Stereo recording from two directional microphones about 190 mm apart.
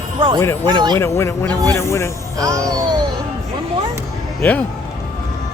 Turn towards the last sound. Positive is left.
turn(degrees=5)  # may be behind; listen again after turning